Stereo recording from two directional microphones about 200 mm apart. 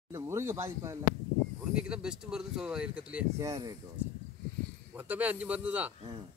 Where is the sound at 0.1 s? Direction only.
15° right (ahead or behind).